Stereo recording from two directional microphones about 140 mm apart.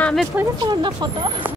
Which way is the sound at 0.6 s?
30° right (ahead or behind).